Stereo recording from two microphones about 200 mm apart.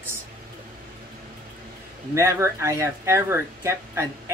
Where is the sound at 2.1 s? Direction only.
15° right (ahead or behind).